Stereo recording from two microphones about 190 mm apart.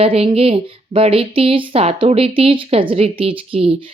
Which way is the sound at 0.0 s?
30° right (ahead or behind).